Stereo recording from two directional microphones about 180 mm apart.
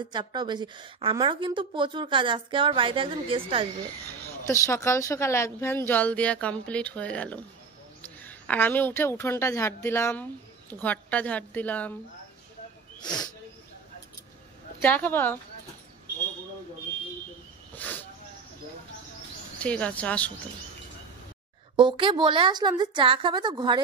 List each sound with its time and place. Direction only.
0.0 s a woman's voice: 25° right (ahead or behind)
4.5 s a woman's voice: 15° left (ahead or behind)
13.0 s speech: 25° left (ahead or behind)
14.8 s a woman's voice: 10° left (ahead or behind)
17.7 s a sound: 10° left (ahead or behind)
19.6 s a woman's voice: 5° left (ahead or behind)
21.7 s a woman's voice: 25° right (ahead or behind)